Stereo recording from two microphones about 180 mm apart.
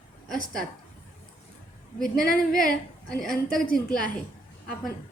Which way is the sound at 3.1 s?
Centre (ahead or behind).